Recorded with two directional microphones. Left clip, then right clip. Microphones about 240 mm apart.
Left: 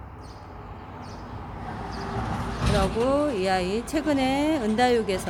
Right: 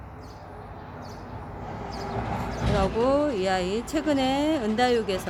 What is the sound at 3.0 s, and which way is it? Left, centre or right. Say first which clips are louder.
Speech: right 2 dB; centre.